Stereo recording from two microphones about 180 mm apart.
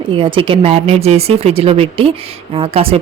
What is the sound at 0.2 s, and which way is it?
Speech, 30° right (ahead or behind).